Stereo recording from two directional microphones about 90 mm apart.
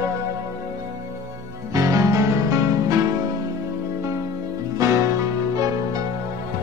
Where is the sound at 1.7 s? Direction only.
35° right (ahead or behind).